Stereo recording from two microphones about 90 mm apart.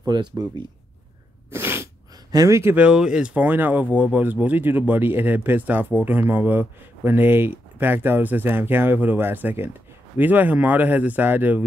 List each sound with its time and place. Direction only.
0.0 s speech: 50° right (ahead or behind)
1.5 s sneeze: 25° right (ahead or behind)
2.3 s speech: 40° right (ahead or behind)
2.6 s speech: 20° right (ahead or behind)